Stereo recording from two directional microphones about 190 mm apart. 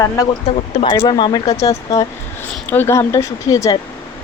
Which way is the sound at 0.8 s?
25° left (ahead or behind).